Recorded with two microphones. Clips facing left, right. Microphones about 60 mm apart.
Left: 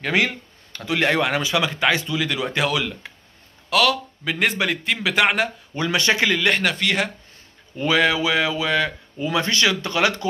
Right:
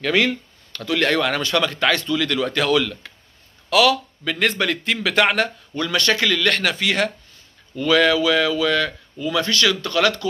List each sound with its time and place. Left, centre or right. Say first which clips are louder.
0.0 s speech: right 2 dB; centre
3.7 s a man's voice: right 3 dB; centre
4.2 s a man's voice: right 1 dB; centre
5.8 s speech: even; centre
6.6 s a man's voice: right 1 dB; centre
7.7 s speech: right 2 dB; left